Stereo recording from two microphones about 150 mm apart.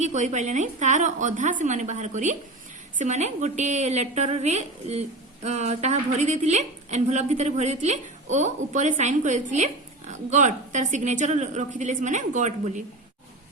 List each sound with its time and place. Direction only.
0.0 s a woman's voice: 50° right (ahead or behind)